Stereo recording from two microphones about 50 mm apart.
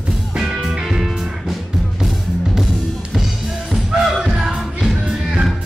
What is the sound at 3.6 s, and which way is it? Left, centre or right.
Music, centre.